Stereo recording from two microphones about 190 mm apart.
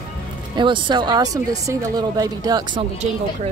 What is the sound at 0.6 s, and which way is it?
Speech, 25° right (ahead or behind).